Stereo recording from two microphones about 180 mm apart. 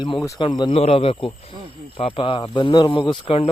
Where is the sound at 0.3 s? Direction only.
25° left (ahead or behind).